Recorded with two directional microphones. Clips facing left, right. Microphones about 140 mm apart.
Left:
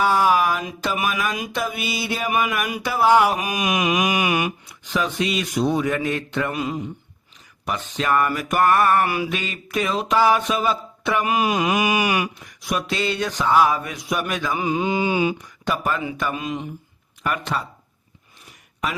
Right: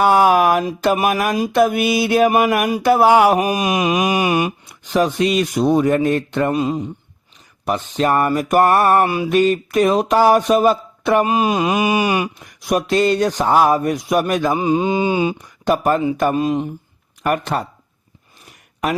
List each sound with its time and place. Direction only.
0.0 s a sound: 60° right (ahead or behind)
0.6 s speech: 45° right (ahead or behind)
3.3 s speech: 35° right (ahead or behind)
4.9 s speech: 45° right (ahead or behind); by 6.8 s 30° right (ahead or behind)
7.6 s speech: 40° right (ahead or behind)
9.0 s a sound: 25° right (ahead or behind)
9.3 s speech: 45° right (ahead or behind)
11.3 s a sound: 30° right (ahead or behind)
12.6 s speech: 45° right (ahead or behind)
14.6 s a sound: 30° right (ahead or behind)
15.6 s speech: 45° right (ahead or behind)
17.2 s speech: 50° right (ahead or behind)